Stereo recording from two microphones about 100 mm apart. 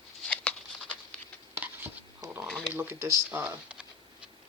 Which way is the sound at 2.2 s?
35° right (ahead or behind).